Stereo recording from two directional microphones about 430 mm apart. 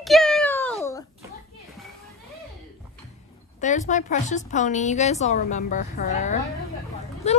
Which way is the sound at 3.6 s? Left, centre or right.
Centre.